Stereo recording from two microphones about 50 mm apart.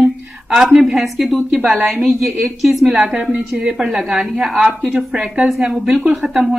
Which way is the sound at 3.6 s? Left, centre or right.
Centre.